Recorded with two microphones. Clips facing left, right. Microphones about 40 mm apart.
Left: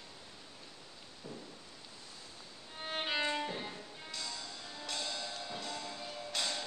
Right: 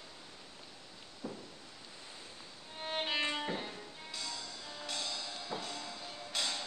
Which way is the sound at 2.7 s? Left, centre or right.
Centre.